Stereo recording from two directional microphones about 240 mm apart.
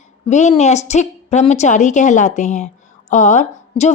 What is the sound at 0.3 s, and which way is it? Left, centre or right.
A woman's voice, left.